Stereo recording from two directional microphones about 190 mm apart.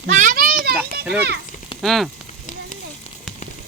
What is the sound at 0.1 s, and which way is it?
Children playing, 40° right (ahead or behind).